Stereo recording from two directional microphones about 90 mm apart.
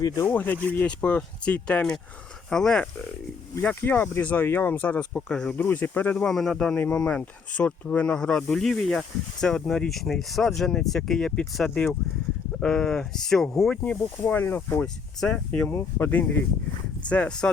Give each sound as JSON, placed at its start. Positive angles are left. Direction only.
{"t": 0.3, "sound": "speech", "side_deg": 20}
{"t": 3.6, "sound": "speech", "side_deg": 20}
{"t": 6.2, "sound": "speech", "side_deg": 5}
{"t": 13.8, "sound": "speech", "side_deg": 15}
{"t": 15.2, "sound": "speech", "side_deg": 10}
{"t": 15.7, "sound": "speech", "side_deg": 20}